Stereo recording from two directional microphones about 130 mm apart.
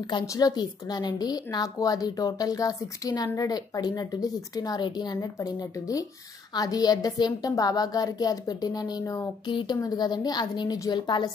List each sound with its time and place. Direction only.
0.0 s a woman's voice: 30° left (ahead or behind)
9.5 s a woman's voice: 40° left (ahead or behind)